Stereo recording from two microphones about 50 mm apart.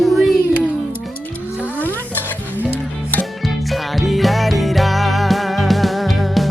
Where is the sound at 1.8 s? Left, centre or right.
Left.